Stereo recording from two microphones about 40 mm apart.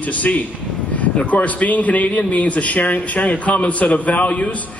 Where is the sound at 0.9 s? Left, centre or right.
Left.